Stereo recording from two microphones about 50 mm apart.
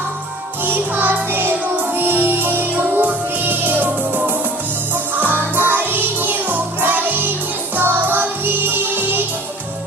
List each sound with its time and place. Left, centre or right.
0.6 s music: right